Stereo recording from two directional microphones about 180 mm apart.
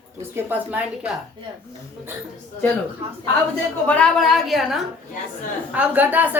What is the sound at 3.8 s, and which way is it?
A woman's voice, 5° left (ahead or behind).